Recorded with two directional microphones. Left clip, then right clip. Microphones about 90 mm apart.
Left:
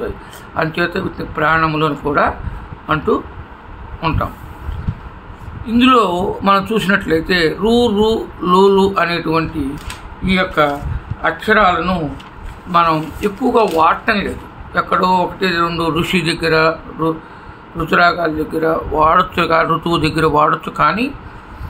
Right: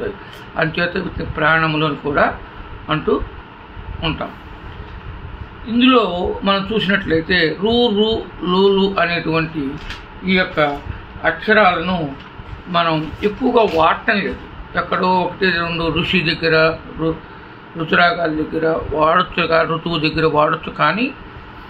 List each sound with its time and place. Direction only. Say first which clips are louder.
0.6 s a man's voice: left 1 dB; 40° left (ahead or behind)
2.0 s a man's voice: left 1 dB; 50° left (ahead or behind)
5.8 s speech: left 2 dB; 90° left
7.1 s speech: left 1 dB; 75° left (ahead or behind); by 8.9 s 90° left
8.9 s a man's voice: left 1 dB; 50° left (ahead or behind)
10.2 s a man's voice: left 2 dB; 40° left (ahead or behind)